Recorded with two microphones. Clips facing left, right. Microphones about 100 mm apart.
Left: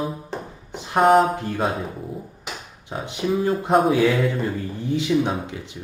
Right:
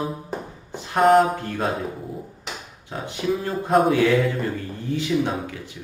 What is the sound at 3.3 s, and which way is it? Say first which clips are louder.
Speech: left 2 dB; 5° left (ahead or behind).